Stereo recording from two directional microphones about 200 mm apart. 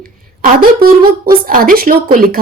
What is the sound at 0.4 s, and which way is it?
A woman's voice, 45° right (ahead or behind).